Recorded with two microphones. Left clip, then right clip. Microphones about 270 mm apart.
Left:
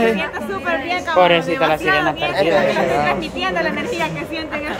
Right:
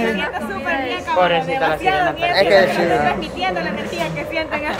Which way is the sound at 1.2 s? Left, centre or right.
Left.